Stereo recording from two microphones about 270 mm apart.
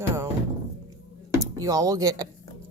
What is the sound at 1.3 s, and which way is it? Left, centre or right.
Speech, centre.